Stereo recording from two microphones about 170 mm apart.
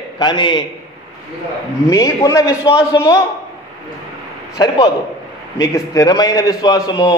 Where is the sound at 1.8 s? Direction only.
20° left (ahead or behind).